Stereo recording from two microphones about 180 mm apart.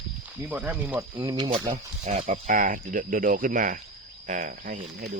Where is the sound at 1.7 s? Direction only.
40° right (ahead or behind).